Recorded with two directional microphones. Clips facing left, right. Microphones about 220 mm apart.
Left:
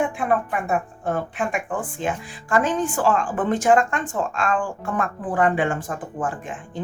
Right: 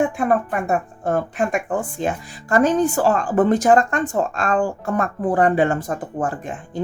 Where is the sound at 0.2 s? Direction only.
40° right (ahead or behind).